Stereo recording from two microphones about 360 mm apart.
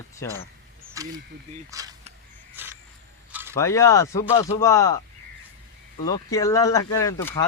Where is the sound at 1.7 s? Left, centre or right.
Centre.